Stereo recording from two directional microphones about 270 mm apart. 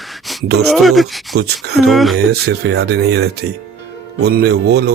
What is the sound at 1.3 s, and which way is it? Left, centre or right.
Speech, right.